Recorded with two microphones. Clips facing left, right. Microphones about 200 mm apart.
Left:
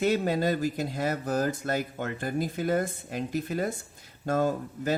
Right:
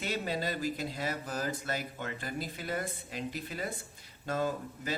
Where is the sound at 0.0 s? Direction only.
50° left (ahead or behind).